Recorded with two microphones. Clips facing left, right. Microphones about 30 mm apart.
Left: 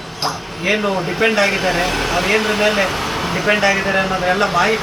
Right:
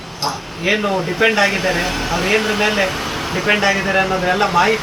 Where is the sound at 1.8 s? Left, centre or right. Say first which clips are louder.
Left 2 dB; left.